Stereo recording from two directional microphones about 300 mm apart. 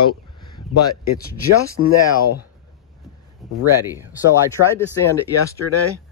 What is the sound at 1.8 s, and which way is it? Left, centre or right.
Speech, left.